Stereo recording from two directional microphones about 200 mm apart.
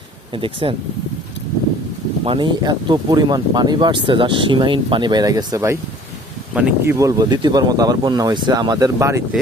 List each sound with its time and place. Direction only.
0.3 s speech: 25° right (ahead or behind)
2.2 s speech: 25° right (ahead or behind)
6.5 s speech: 5° right (ahead or behind)
6.9 s speech: 15° right (ahead or behind)